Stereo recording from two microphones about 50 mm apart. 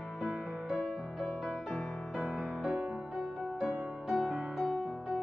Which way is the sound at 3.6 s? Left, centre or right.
Centre.